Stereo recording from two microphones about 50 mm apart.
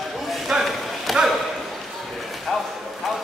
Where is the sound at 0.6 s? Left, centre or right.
Centre.